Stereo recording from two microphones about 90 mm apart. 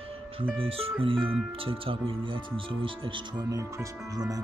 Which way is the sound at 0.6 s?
90° right.